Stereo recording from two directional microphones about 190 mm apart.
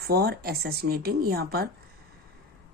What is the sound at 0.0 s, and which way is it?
Speech, 55° right (ahead or behind).